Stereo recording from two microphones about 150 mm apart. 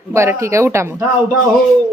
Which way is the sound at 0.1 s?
20° right (ahead or behind).